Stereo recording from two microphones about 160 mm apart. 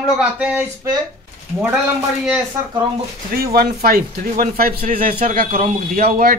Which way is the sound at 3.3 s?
70° right (ahead or behind).